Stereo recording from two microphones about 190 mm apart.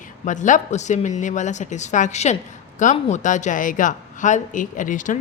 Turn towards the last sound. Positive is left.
turn(degrees=45)  # may be behind; listen again after turning